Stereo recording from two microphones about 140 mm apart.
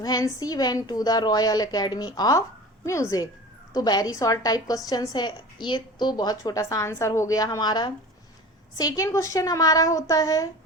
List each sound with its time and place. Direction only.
0.0 s a woman's voice: 30° left (ahead or behind)